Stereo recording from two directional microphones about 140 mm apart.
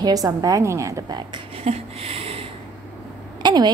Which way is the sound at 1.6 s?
45° right (ahead or behind).